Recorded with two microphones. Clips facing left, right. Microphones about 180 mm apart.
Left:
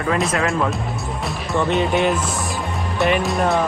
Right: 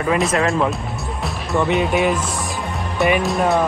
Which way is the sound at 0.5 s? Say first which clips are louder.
Right 2 dB; centre (ahead or behind).